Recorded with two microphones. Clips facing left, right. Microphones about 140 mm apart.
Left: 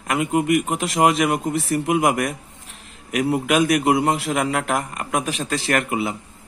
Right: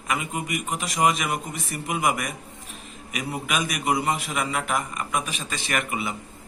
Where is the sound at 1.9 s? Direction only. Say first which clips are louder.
Left 3 dB; 60° left (ahead or behind).